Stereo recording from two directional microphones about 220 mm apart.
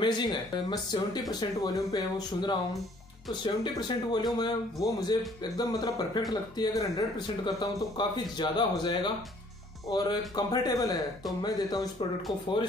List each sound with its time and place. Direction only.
0.0 s speech: 20° left (ahead or behind)